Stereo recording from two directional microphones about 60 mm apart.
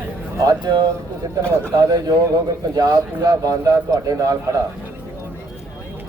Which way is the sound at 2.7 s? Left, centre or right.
Right.